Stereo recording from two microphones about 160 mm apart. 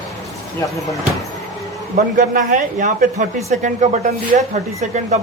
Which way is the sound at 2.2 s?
50° right (ahead or behind).